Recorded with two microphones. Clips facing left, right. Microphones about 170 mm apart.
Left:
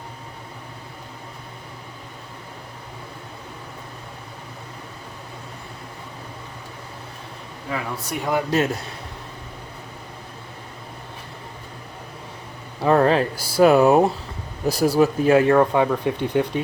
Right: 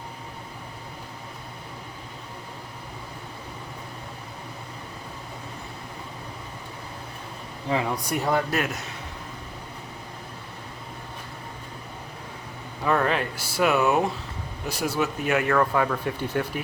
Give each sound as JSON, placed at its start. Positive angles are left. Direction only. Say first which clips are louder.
{"t": 8.1, "sound": "speech", "louder": "left 1 dB", "side_deg": 0}
{"t": 8.4, "sound": "speech", "louder": "left 6 dB", "side_deg": 30}
{"t": 12.8, "sound": "speech", "louder": "left 7 dB", "side_deg": 35}